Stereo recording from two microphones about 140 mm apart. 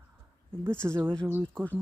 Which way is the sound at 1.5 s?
10° left (ahead or behind).